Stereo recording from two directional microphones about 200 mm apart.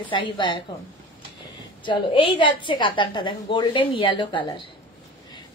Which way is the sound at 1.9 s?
25° left (ahead or behind).